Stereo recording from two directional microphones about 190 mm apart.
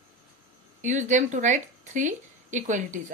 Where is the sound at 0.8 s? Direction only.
40° right (ahead or behind).